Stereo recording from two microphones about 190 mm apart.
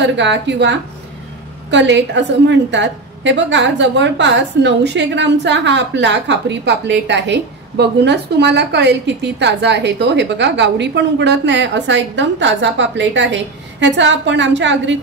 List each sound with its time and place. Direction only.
0.0 s a woman's voice: 70° right (ahead or behind)